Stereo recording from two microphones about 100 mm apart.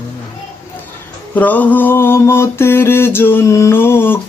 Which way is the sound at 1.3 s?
15° left (ahead or behind).